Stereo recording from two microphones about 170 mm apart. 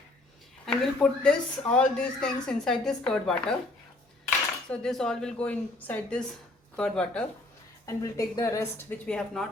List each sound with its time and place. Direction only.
0.6 s speech: 5° left (ahead or behind)
4.7 s speech: 5° left (ahead or behind)
7.9 s speech: 20° left (ahead or behind)